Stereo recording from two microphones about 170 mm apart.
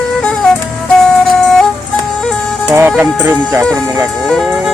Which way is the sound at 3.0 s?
10° right (ahead or behind).